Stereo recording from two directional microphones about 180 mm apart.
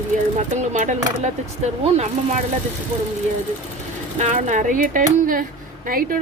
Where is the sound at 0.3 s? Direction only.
40° right (ahead or behind).